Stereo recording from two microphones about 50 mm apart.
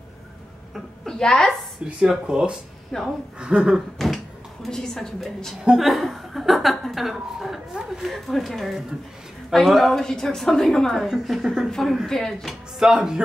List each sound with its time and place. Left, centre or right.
1.0 s a woman's voice: centre
2.0 s speech: centre
2.9 s a woman's voice: centre
3.3 s speech: centre
4.6 s a woman's voice: centre
8.0 s a woman's voice: centre
11.1 s speech: centre
12.1 s a woman's voice: centre
12.7 s speech: centre